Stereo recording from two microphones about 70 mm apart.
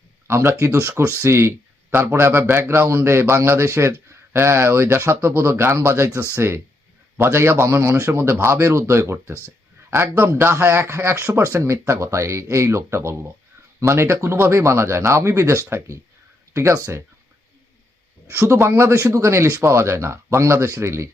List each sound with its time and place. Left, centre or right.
0.3 s a man's voice: right
16.7 s speech: right
18.5 s a man's voice: right